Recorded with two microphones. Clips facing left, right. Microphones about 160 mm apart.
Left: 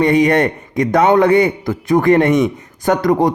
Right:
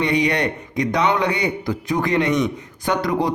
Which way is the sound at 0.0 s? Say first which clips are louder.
Left 7 dB; 50° left (ahead or behind).